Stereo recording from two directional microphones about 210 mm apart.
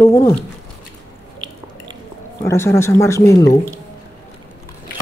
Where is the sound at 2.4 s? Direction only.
15° left (ahead or behind).